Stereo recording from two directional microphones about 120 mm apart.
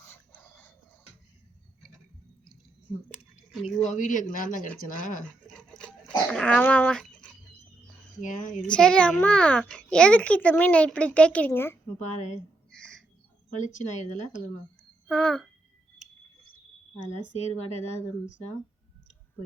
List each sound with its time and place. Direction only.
0.0 s dog: 15° left (ahead or behind)
3.1 s a sound: 5° right (ahead or behind)
3.9 s speech: 90° left
5.5 s dog: 5° left (ahead or behind)
8.2 s speech: 90° left
8.6 s a child's voice: 5° left (ahead or behind)
12.1 s a woman's voice: 80° left
12.7 s bird: 5° left (ahead or behind)
13.6 s speech: 90° left
15.0 s speech: 5° left (ahead or behind)
17.3 s speech: 65° left (ahead or behind)